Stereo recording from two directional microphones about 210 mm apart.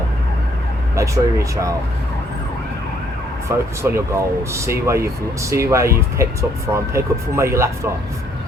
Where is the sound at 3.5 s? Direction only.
10° right (ahead or behind).